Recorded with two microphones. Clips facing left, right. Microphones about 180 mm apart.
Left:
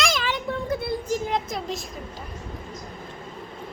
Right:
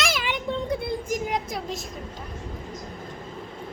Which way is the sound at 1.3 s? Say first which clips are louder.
Left 1 dB; centre (ahead or behind).